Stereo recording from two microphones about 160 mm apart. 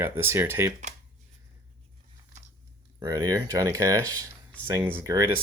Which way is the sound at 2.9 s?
20° right (ahead or behind).